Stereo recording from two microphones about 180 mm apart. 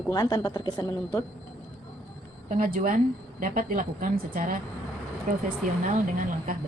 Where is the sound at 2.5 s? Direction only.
50° right (ahead or behind).